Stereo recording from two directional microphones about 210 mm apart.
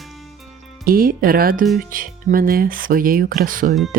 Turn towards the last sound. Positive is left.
turn(degrees=-40)  # may be behind; listen again after turning